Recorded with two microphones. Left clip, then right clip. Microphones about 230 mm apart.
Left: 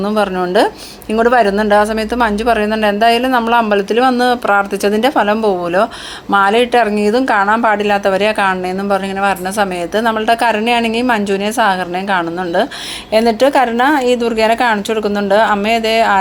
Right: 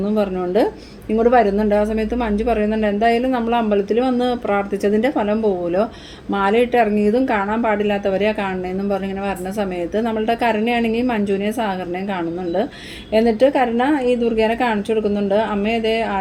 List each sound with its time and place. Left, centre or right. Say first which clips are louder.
0.1 s a woman's voice: left 5 dB; centre